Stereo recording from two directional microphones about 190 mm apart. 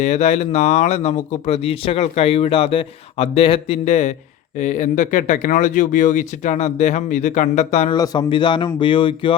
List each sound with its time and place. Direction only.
0.0 s speech: 35° left (ahead or behind)
7.9 s speech: 20° left (ahead or behind)